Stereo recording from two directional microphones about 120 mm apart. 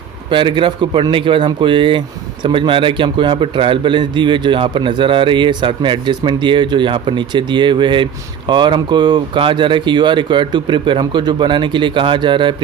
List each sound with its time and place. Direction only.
0.3 s a man's voice: 40° right (ahead or behind)